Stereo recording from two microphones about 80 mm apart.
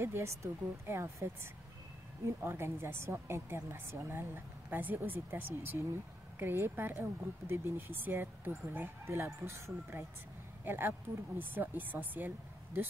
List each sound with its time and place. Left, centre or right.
0.0 s a woman's voice: right